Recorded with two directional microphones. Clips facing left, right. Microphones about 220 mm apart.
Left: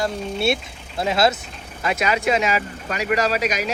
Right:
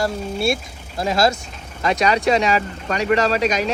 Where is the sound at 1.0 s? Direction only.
5° left (ahead or behind).